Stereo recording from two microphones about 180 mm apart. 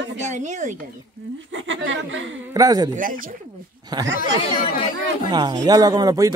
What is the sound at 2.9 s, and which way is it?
Speech, 50° right (ahead or behind).